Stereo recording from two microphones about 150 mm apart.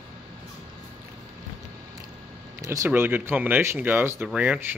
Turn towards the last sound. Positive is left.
turn(degrees=-10)  # may be behind; listen again after turning